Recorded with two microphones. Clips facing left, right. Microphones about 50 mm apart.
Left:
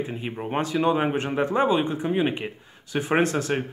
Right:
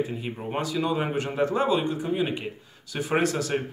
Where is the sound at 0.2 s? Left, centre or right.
Left.